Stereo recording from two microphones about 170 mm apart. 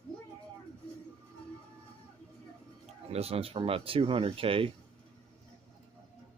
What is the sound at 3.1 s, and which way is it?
Speech, 35° right (ahead or behind).